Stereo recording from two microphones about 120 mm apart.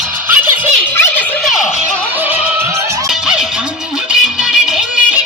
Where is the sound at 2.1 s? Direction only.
15° right (ahead or behind).